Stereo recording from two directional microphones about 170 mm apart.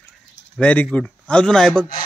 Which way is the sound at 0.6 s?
10° left (ahead or behind).